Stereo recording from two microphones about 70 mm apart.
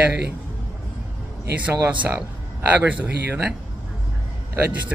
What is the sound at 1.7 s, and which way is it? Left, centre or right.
Speech, right.